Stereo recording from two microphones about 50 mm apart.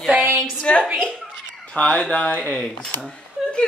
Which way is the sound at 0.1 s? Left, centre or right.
Right.